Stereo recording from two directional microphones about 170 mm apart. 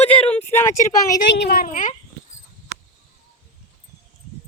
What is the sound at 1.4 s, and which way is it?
Speech, 60° left (ahead or behind).